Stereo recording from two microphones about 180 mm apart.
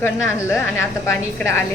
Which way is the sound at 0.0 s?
15° left (ahead or behind).